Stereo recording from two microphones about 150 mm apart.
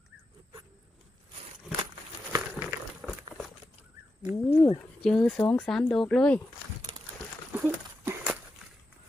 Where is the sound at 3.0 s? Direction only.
Centre (ahead or behind).